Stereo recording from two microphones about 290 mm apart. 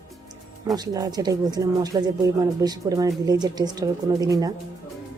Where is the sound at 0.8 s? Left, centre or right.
Centre.